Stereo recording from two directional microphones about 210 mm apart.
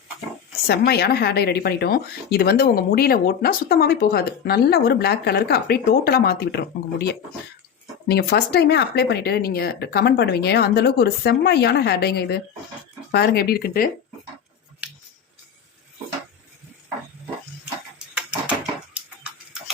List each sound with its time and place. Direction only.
0.7 s speech: 50° left (ahead or behind)